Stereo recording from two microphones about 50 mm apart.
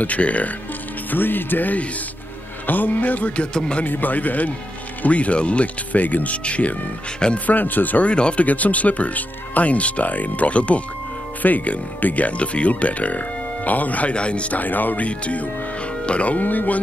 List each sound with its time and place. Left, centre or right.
0.0 s speech: left
1.1 s speech: left
3.5 s speech: centre
3.8 s speech: left
7.4 s speech: left
8.1 s speech: left